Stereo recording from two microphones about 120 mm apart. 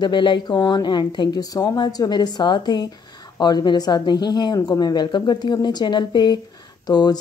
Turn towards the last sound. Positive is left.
turn(degrees=35)  # may be behind; listen again after turning